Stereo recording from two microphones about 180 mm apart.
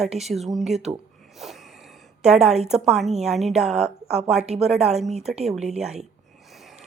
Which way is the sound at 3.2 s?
Centre (ahead or behind).